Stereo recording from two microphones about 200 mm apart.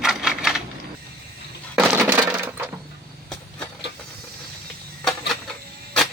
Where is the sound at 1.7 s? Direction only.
5° right (ahead or behind).